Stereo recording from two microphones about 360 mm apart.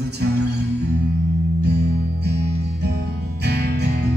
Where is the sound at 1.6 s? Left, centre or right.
Right.